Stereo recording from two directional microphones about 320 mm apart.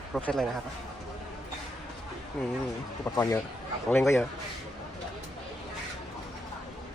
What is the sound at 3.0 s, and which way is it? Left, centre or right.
A man's voice, centre.